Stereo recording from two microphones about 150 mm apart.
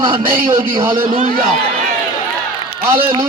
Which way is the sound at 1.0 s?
60° right (ahead or behind).